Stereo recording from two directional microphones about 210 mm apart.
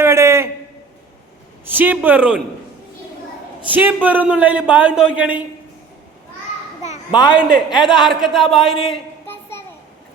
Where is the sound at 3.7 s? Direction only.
10° right (ahead or behind).